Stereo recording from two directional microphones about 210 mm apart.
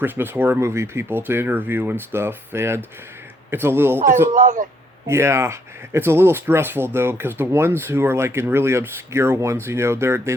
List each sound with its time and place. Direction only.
0.0 s speech: 10° right (ahead or behind)
4.3 s speech: 40° right (ahead or behind)
5.0 s speech: 15° right (ahead or behind)